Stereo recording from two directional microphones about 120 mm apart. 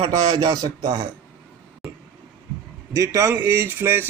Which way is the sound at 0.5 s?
35° right (ahead or behind).